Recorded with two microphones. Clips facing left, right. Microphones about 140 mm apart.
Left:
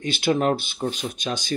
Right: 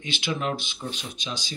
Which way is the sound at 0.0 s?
40° left (ahead or behind).